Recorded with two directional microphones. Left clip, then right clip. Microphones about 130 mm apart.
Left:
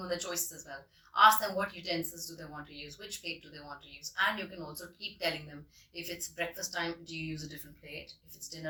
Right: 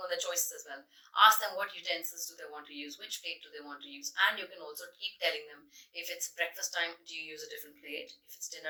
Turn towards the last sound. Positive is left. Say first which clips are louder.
# right 3 dB
turn(degrees=15)  # may be behind; listen again after turning